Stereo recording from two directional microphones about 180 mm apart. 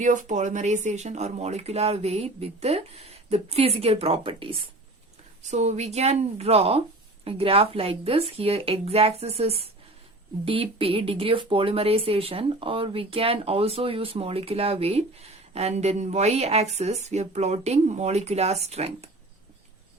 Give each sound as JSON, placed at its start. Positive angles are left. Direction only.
{"t": 0.0, "sound": "speech", "side_deg": -45}
{"t": 5.4, "sound": "speech", "side_deg": -40}